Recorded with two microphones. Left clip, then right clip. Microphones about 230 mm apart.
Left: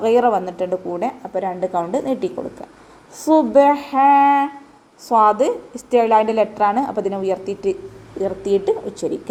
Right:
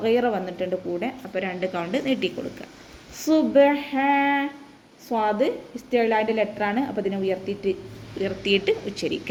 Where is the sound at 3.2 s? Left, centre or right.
Centre.